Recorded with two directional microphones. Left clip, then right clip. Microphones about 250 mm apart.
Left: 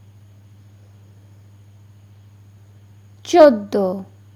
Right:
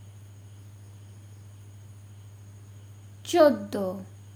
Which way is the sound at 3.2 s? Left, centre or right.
Left.